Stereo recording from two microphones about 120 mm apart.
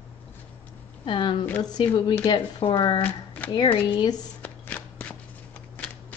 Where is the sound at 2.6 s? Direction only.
45° left (ahead or behind).